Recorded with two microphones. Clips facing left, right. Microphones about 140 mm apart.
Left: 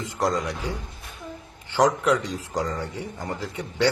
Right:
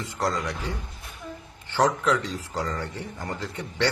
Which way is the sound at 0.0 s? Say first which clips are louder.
Left 3 dB; 15° left (ahead or behind).